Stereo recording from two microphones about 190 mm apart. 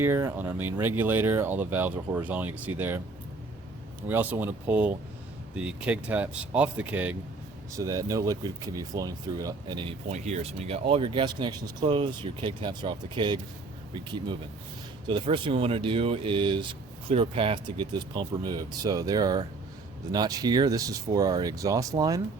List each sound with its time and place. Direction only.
0.0 s speech: 15° right (ahead or behind)
4.1 s speech: 10° right (ahead or behind)
10.1 s speech: 35° right (ahead or behind); by 22.2 s 20° right (ahead or behind)